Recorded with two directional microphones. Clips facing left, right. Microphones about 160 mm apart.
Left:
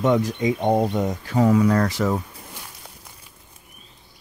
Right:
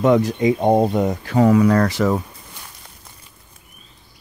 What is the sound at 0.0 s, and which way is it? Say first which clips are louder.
Speech: right 4 dB; 75° right (ahead or behind).